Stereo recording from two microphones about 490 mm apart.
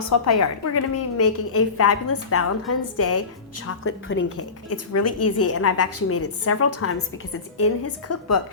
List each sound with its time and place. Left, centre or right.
0.0 s a woman's voice: left